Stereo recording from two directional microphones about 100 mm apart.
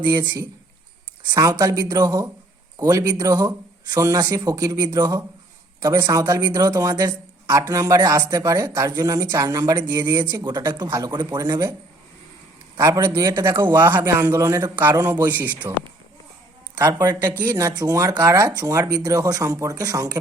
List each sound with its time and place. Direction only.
0.1 s speech: 45° right (ahead or behind)
12.8 s speech: 35° right (ahead or behind)
13.7 s a man's voice: 25° right (ahead or behind)
16.7 s speech: 40° right (ahead or behind)